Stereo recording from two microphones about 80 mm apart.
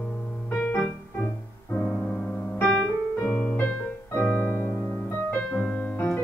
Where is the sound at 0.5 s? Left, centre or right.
Left.